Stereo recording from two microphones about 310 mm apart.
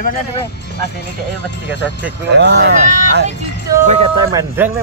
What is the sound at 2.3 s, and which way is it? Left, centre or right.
Speech, right.